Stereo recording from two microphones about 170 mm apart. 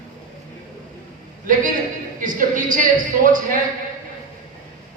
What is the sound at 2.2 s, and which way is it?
A woman's voice, 55° right (ahead or behind).